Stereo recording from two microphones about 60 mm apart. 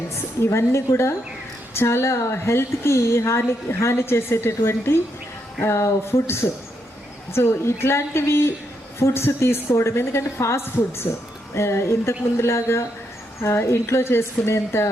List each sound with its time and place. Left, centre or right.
0.1 s a woman's voice: left